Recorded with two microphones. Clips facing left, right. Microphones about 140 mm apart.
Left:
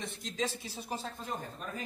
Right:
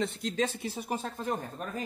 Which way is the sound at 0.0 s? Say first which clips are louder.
Right 6 dB; 65° right (ahead or behind).